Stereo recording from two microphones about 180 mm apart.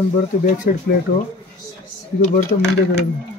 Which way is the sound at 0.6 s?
50° left (ahead or behind).